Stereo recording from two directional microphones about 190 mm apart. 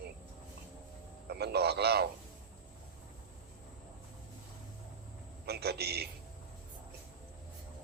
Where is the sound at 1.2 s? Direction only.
60° right (ahead or behind).